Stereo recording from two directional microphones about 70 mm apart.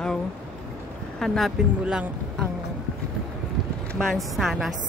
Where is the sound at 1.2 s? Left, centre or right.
Centre.